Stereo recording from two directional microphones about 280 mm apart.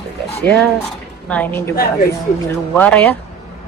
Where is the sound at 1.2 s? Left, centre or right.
Centre.